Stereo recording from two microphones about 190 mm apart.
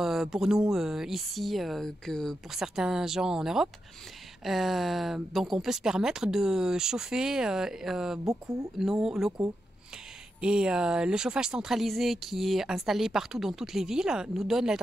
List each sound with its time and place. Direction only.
0.0 s speech: centre (ahead or behind)